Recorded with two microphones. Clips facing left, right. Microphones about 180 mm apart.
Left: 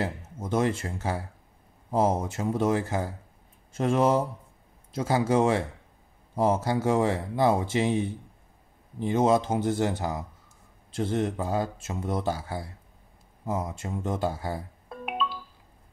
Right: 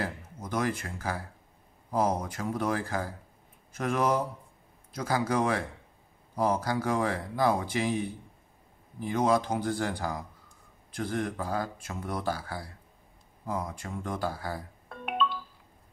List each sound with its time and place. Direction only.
0.0 s speech: 25° left (ahead or behind)
14.9 s music: 5° left (ahead or behind)